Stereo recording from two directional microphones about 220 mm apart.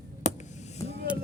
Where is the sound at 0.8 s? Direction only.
15° left (ahead or behind).